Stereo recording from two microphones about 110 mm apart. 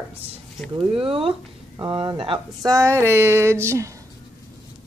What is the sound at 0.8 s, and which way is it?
Speech, 55° right (ahead or behind).